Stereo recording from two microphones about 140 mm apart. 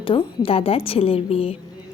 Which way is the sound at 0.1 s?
40° left (ahead or behind).